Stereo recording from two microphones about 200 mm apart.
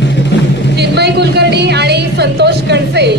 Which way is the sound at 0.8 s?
55° right (ahead or behind).